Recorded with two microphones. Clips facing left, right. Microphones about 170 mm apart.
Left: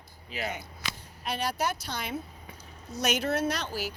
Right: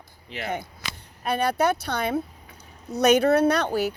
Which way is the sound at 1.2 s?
60° right (ahead or behind).